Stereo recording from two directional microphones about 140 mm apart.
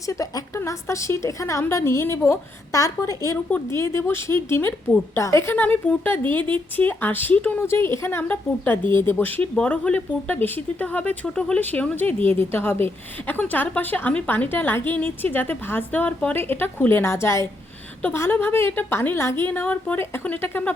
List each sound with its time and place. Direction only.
0.0 s a woman's voice: 25° left (ahead or behind)